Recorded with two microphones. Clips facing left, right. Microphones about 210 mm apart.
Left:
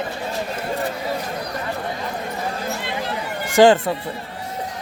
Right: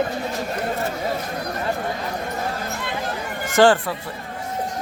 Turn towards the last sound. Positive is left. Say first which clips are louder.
# left 3 dB
turn(degrees=20)  # may be behind; listen again after turning